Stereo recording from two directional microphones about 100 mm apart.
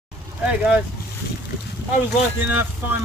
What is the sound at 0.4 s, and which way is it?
Speech, 10° right (ahead or behind).